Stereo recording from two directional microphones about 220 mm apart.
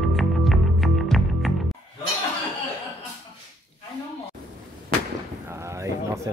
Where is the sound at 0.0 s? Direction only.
Centre (ahead or behind).